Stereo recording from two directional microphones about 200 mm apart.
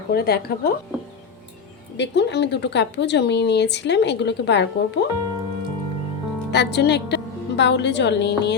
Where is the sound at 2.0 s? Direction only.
60° left (ahead or behind).